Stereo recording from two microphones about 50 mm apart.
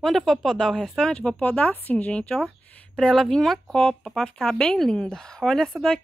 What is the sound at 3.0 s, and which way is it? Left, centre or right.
Speech, centre.